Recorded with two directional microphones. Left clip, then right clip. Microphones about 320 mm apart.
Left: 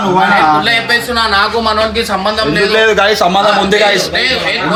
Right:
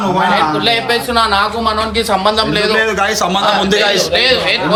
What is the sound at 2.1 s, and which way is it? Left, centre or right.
Speech, centre.